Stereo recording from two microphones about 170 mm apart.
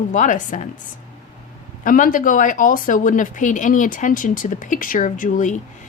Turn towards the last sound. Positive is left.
turn(degrees=50)  # may be behind; listen again after turning